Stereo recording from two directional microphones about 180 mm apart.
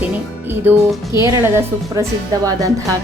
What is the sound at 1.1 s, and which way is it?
A woman's voice, 15° right (ahead or behind).